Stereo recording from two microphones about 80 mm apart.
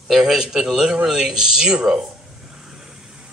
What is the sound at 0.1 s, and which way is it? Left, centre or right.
Speech, centre.